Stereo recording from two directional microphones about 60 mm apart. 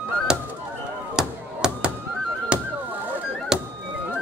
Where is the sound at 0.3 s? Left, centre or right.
Centre.